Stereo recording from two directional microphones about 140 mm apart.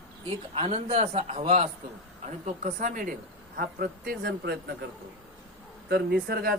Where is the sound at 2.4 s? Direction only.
70° right (ahead or behind).